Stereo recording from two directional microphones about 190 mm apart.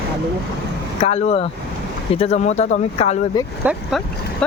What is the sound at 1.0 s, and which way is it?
Speech, 35° left (ahead or behind).